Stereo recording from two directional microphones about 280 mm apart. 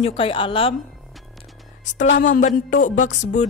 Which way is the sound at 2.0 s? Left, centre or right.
Left.